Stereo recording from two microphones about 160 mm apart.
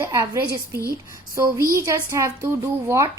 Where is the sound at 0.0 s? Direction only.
15° right (ahead or behind).